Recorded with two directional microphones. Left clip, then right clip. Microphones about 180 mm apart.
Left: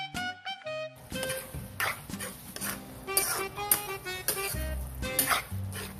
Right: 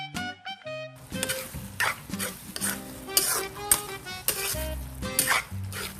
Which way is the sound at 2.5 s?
25° right (ahead or behind).